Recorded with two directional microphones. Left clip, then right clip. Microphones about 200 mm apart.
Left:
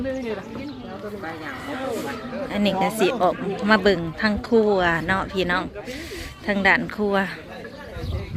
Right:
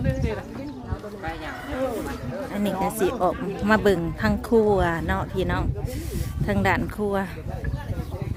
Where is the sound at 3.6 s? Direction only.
20° right (ahead or behind).